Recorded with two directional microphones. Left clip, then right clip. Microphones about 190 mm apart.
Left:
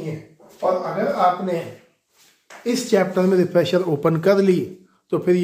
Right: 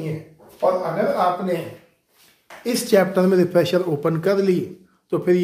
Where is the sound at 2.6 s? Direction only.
20° right (ahead or behind).